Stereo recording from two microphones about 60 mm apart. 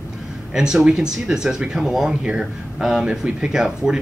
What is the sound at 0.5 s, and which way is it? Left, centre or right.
A man's voice, centre.